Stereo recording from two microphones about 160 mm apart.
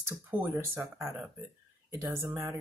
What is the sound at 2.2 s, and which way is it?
Speech, 15° right (ahead or behind).